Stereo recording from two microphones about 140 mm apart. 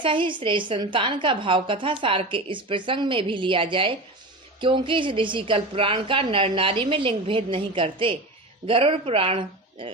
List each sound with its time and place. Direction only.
0.0 s a woman's voice: 35° right (ahead or behind)